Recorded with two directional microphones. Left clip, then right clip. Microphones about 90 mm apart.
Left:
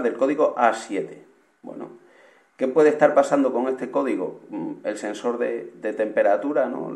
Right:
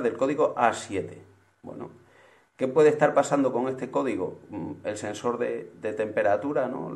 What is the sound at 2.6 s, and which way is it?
A man's voice, 20° right (ahead or behind).